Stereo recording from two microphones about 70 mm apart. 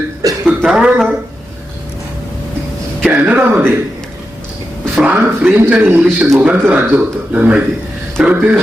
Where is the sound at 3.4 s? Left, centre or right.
Right.